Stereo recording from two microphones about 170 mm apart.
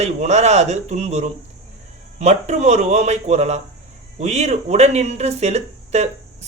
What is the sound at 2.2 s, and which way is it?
Speech, 40° right (ahead or behind).